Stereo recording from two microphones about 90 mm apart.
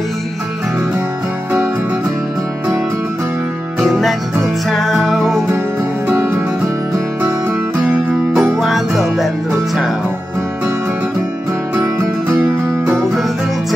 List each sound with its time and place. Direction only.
3.8 s music: centre (ahead or behind)
6.0 s music: 30° right (ahead or behind)
7.8 s music: 10° right (ahead or behind)
12.0 s music: 25° right (ahead or behind)